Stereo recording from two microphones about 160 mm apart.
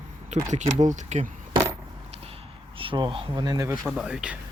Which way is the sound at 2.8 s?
30° right (ahead or behind).